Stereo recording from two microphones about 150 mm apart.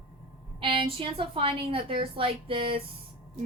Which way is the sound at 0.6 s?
35° right (ahead or behind).